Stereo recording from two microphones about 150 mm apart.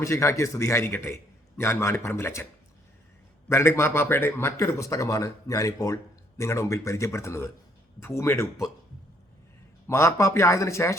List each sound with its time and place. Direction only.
0.0 s a man's voice: 20° left (ahead or behind)
3.5 s a man's voice: 15° left (ahead or behind)
9.8 s speech: 20° left (ahead or behind)